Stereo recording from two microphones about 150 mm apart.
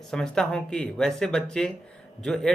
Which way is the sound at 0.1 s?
5° left (ahead or behind).